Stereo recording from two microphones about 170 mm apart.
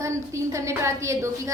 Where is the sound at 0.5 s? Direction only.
15° right (ahead or behind).